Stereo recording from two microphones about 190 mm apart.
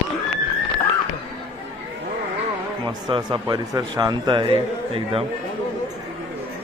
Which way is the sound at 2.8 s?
20° right (ahead or behind).